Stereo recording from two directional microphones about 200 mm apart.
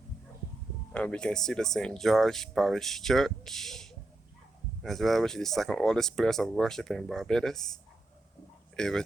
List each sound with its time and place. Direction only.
0.9 s speech: 5° left (ahead or behind)